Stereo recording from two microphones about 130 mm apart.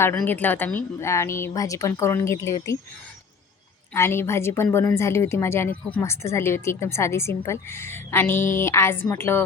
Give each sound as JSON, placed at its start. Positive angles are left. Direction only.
{"t": 0.3, "sound": "a woman's voice", "side_deg": 15}
{"t": 3.9, "sound": "a woman's voice", "side_deg": 20}